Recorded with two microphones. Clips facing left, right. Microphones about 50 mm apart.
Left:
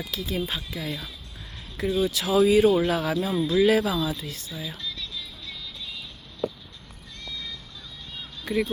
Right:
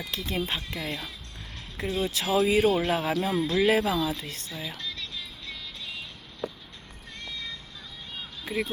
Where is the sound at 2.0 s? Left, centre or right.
Right.